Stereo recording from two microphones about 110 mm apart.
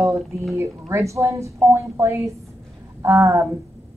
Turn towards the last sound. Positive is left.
turn(degrees=-25)  # may be behind; listen again after turning